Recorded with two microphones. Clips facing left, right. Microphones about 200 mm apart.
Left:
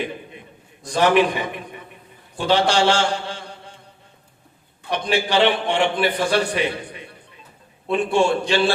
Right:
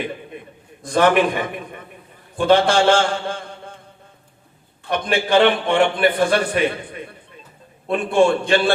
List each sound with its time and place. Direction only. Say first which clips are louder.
0.3 s a sound: right 6 dB; 55° right (ahead or behind)
0.8 s a man's voice: right 1 dB; 50° right (ahead or behind)
4.9 s a man's voice: right 2 dB; 50° right (ahead or behind)
7.9 s a man's voice: right 2 dB; 55° right (ahead or behind)